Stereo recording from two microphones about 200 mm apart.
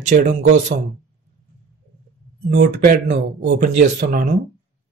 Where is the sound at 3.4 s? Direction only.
55° right (ahead or behind).